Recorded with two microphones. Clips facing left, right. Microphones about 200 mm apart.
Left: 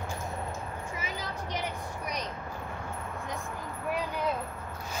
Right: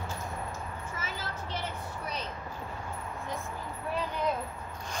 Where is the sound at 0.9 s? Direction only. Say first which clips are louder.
Left 1 dB; 15° left (ahead or behind).